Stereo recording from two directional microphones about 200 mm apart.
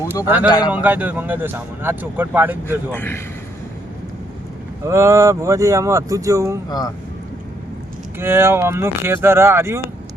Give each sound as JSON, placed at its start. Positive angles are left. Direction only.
{"t": 0.3, "sound": "speech", "side_deg": -10}
{"t": 2.9, "sound": "a man's voice", "side_deg": 10}
{"t": 4.9, "sound": "speech", "side_deg": -15}
{"t": 6.7, "sound": "speech", "side_deg": 20}
{"t": 8.2, "sound": "speech", "side_deg": -10}